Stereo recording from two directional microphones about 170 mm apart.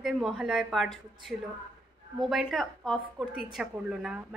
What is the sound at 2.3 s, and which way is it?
Speech, centre (ahead or behind).